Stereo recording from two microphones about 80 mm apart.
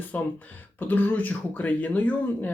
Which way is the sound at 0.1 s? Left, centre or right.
Left.